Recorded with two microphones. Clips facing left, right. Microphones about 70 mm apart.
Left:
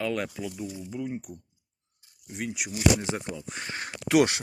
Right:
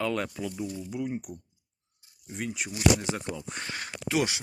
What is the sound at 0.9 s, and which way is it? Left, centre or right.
Speech, centre.